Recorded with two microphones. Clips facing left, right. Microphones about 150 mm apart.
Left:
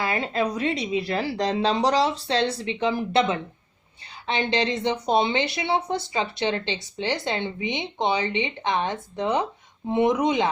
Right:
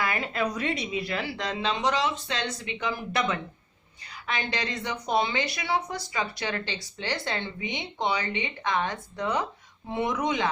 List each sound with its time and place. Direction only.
0.0 s speech: 30° left (ahead or behind)